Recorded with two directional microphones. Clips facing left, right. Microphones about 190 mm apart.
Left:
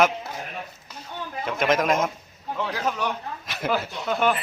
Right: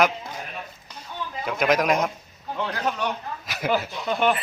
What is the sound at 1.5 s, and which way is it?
A man's voice, centre (ahead or behind).